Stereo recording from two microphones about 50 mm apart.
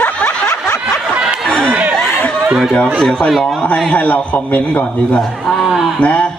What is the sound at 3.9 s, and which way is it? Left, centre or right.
Speech, left.